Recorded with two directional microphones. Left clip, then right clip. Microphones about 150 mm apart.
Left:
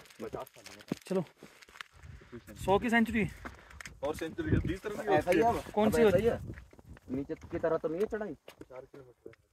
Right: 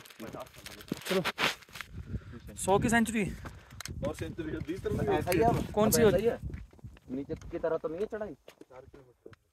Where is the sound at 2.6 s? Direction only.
30° right (ahead or behind).